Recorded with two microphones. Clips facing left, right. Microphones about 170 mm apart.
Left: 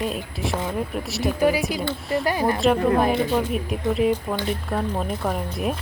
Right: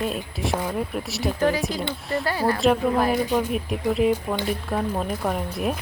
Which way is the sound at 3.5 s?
Centre (ahead or behind).